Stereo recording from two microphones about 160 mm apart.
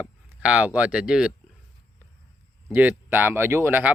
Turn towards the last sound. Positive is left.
turn(degrees=-10)  # may be behind; listen again after turning